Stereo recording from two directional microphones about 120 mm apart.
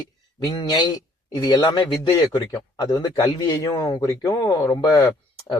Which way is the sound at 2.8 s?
35° left (ahead or behind).